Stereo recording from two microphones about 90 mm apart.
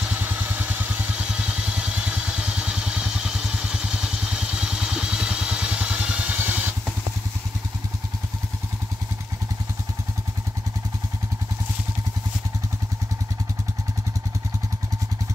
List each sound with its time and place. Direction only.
0.0 s vehicle: 15° right (ahead or behind)